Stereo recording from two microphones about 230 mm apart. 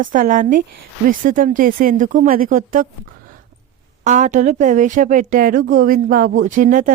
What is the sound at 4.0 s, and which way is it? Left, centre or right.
A woman's voice, right.